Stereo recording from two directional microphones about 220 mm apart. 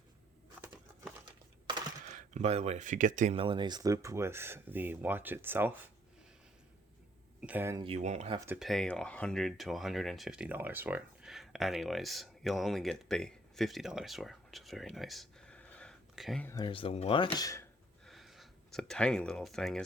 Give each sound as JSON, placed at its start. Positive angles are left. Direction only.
{"t": 2.1, "sound": "speech", "side_deg": -30}
{"t": 7.4, "sound": "speech", "side_deg": -10}
{"t": 7.9, "sound": "speech", "side_deg": -30}
{"t": 8.4, "sound": "speech", "side_deg": 0}
{"t": 18.0, "sound": "a sound", "side_deg": 0}